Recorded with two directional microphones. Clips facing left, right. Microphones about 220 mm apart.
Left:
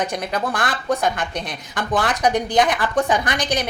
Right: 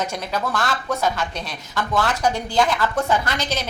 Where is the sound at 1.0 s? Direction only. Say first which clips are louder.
Left 1 dB; 55° left (ahead or behind).